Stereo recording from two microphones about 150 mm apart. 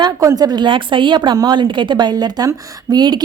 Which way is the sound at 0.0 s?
25° right (ahead or behind).